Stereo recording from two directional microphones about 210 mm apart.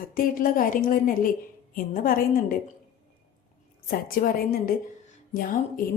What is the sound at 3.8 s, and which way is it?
A woman's voice, 45° left (ahead or behind).